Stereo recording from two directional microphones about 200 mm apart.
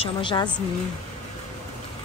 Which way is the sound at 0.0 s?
25° left (ahead or behind).